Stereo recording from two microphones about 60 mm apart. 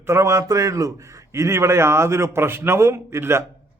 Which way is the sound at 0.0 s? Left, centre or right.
Right.